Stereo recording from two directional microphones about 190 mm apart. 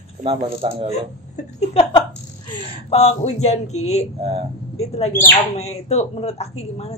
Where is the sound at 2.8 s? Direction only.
35° left (ahead or behind).